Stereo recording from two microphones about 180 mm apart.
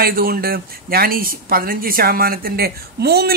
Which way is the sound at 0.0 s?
55° right (ahead or behind).